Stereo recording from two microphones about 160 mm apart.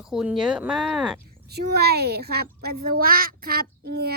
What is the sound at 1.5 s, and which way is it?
Speech, 90° right.